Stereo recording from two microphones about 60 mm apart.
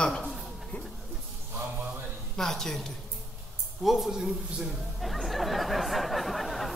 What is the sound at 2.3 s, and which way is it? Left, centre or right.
Speech, centre.